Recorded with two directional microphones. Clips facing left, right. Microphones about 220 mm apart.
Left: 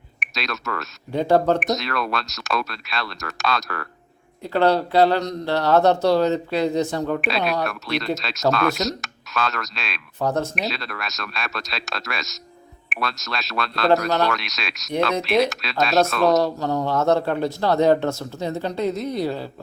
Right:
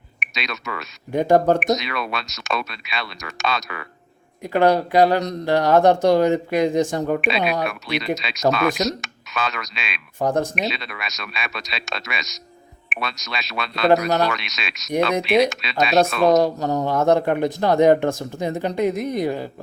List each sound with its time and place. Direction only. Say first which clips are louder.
0.3 s speech: left 2 dB; centre (ahead or behind)
1.1 s speech: right 2 dB; 15° right (ahead or behind)
1.5 s speech: right 2 dB; centre (ahead or behind)
4.4 s speech: right 2 dB; 15° right (ahead or behind)
7.2 s speech: right 1 dB; centre (ahead or behind)
10.2 s speech: right 2 dB; 15° right (ahead or behind)
10.5 s speech: right 1 dB; centre (ahead or behind)
14.1 s speech: right 1 dB; 15° right (ahead or behind)
14.3 s speech: left 1 dB; centre (ahead or behind)
16.2 s speech: right 2 dB; 15° right (ahead or behind)